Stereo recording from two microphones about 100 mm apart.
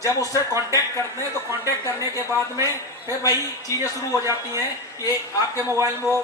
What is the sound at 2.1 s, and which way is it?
Speech, 30° right (ahead or behind).